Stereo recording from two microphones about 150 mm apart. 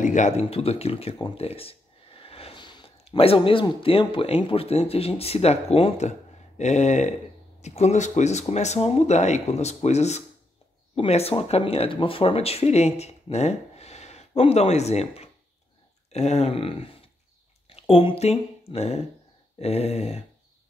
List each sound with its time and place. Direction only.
0.0 s speech: 55° left (ahead or behind)